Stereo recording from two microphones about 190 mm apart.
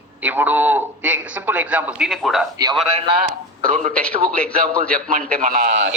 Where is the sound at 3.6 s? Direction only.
40° right (ahead or behind).